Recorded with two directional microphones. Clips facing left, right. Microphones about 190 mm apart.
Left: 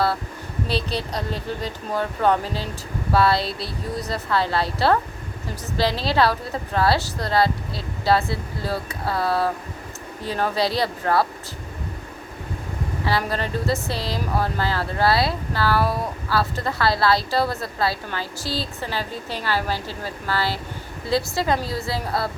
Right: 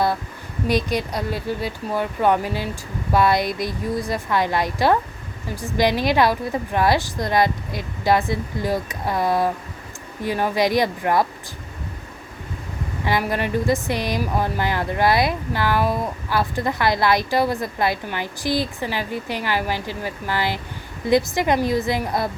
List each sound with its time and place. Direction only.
0.7 s a woman's voice: 15° right (ahead or behind)
13.1 s a woman's voice: 15° right (ahead or behind)